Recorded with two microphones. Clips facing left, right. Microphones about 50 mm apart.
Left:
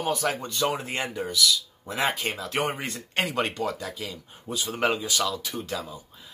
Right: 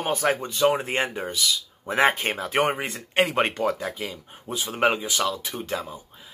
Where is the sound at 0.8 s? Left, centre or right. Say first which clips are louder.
Right 4 dB; right.